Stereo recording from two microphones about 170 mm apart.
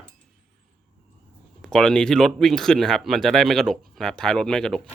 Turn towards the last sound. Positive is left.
turn(degrees=5)  # may be behind; listen again after turning